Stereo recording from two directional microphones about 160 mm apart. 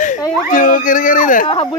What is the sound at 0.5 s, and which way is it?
Speech, 55° left (ahead or behind).